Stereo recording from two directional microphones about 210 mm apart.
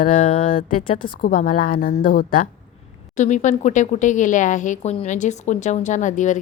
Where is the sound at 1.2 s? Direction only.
40° left (ahead or behind).